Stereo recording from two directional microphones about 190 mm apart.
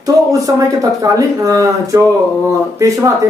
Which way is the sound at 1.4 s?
15° right (ahead or behind).